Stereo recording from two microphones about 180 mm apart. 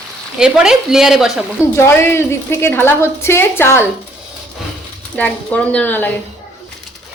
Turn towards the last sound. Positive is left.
turn(degrees=10)  # may be behind; listen again after turning